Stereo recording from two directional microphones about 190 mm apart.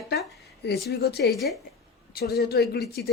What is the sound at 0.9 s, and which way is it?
Speech, 60° left (ahead or behind).